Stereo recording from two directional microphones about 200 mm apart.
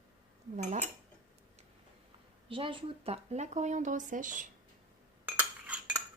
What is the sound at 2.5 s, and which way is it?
Speech, 25° right (ahead or behind).